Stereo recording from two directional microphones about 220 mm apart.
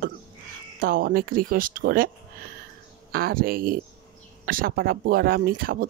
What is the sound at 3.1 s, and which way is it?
Speech, 40° right (ahead or behind).